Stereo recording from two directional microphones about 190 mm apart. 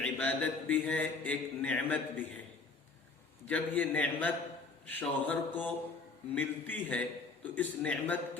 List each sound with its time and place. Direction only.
0.0 s a man's voice: 10° left (ahead or behind)
3.4 s a man's voice: 10° left (ahead or behind)